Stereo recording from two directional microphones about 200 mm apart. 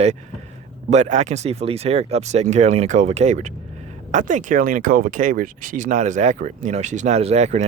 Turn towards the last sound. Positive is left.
turn(degrees=-35)  # may be behind; listen again after turning